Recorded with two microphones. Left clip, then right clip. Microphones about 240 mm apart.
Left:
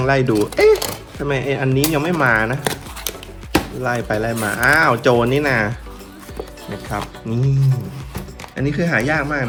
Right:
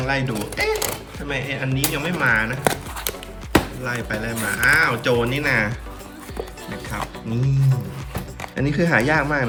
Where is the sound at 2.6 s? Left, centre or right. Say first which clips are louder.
Right 1 dB; centre.